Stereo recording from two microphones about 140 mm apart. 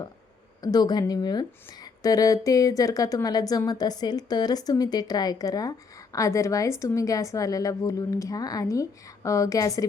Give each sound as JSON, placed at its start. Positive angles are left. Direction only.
{"t": 0.6, "sound": "a woman's voice", "side_deg": 30}